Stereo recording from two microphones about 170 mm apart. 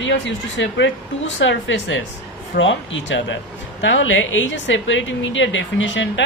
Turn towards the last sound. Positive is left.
turn(degrees=90)